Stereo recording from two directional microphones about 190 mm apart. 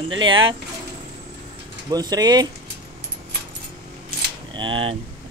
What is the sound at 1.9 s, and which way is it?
Speech, 20° right (ahead or behind).